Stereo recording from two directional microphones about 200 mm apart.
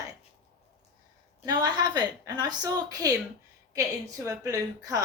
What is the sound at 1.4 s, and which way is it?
A woman's voice, 20° right (ahead or behind).